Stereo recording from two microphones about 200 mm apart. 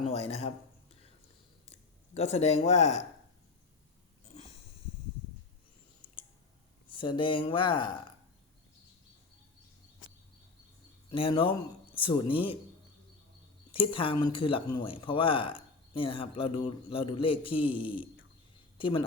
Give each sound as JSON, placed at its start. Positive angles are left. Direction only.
{"t": 0.0, "sound": "a man's voice", "side_deg": 30}
{"t": 1.7, "sound": "speech", "side_deg": 30}
{"t": 4.3, "sound": "a sound", "side_deg": 30}
{"t": 6.9, "sound": "speech", "side_deg": 25}
{"t": 11.1, "sound": "speech", "side_deg": 25}
{"t": 13.7, "sound": "speech", "side_deg": 25}